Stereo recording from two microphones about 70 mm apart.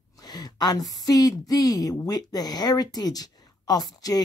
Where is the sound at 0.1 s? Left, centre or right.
Left.